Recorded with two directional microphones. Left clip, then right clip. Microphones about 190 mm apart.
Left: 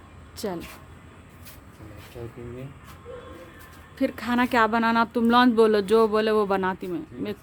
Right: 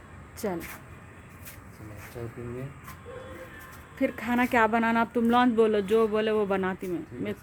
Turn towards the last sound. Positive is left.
turn(degrees=15)  # may be behind; listen again after turning